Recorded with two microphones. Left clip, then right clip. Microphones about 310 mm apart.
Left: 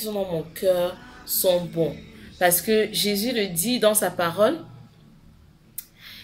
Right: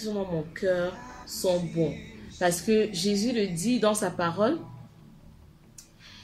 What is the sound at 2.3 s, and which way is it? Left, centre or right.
Speech, left.